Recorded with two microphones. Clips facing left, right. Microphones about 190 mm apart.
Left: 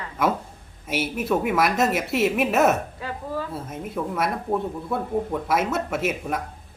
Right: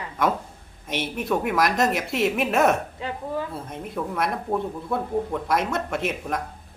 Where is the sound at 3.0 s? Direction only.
25° right (ahead or behind).